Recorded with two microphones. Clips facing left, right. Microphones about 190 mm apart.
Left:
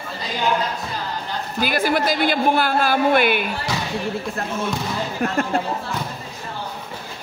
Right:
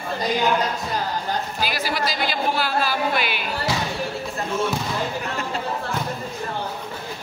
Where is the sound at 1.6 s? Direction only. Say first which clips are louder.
Left 10 dB; 55° left (ahead or behind).